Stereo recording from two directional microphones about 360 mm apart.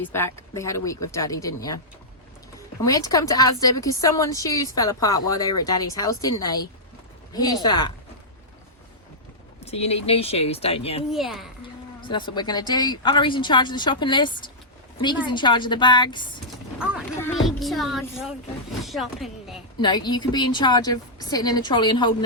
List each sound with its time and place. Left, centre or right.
0.0 s a woman's voice: centre
3.1 s a woman's voice: centre
9.6 s a woman's voice: centre
11.1 s speech: centre
11.9 s a woman's voice: centre
16.7 s speech: centre
19.8 s a woman's voice: centre